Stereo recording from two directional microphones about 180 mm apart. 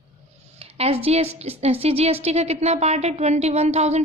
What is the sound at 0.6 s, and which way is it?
A woman's voice, 35° right (ahead or behind).